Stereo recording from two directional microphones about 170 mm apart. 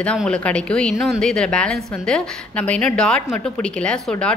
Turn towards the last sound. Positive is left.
turn(degrees=5)  # may be behind; listen again after turning